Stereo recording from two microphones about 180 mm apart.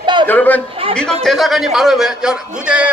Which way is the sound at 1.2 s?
Centre (ahead or behind).